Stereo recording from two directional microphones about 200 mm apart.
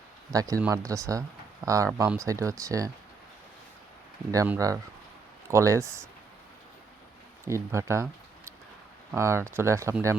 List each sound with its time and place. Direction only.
0.3 s speech: 15° right (ahead or behind)
4.3 s speech: 15° right (ahead or behind)
7.4 s speech: 15° right (ahead or behind)
9.1 s speech: 15° right (ahead or behind)